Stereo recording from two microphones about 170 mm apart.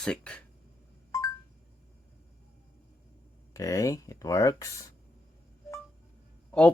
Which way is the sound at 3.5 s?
20° left (ahead or behind).